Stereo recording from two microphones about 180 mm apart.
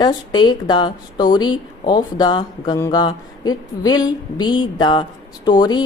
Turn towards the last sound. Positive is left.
turn(degrees=25)  # may be behind; listen again after turning